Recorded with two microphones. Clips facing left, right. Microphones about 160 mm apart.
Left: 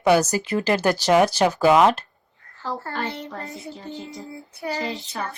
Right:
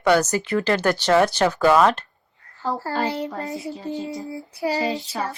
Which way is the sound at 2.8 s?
30° right (ahead or behind).